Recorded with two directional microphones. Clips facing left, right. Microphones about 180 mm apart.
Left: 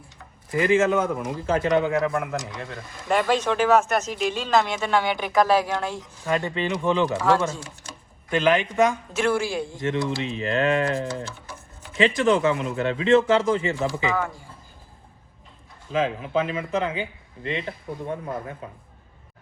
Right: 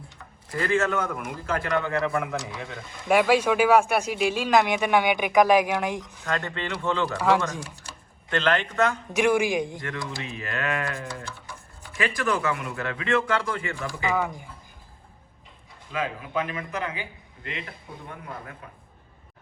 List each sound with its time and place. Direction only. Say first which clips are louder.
0.5 s speech: left 5 dB; 15° left (ahead or behind)
1.9 s speech: left 2 dB; centre (ahead or behind); by 6.0 s 15° right (ahead or behind)
6.2 s speech: left 6 dB; 15° left (ahead or behind)
7.2 s speech: left 1 dB; 15° right (ahead or behind)
8.3 s speech: left 4 dB; 10° left (ahead or behind)
9.1 s speech: right 2 dB; 15° right (ahead or behind)
9.8 s speech: left 8 dB; 25° left (ahead or behind)
14.2 s speech: even; 15° right (ahead or behind)
15.9 s speech: left 6 dB; 25° left (ahead or behind)